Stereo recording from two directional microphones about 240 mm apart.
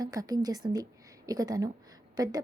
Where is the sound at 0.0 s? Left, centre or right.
Centre.